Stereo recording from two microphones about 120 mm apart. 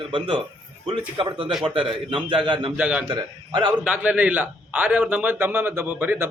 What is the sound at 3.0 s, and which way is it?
Speech, 40° right (ahead or behind).